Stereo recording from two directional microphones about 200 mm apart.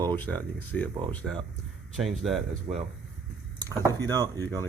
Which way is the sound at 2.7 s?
40° right (ahead or behind).